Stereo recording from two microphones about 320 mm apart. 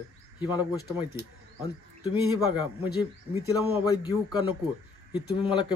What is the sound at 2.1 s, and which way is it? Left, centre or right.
Speech, centre.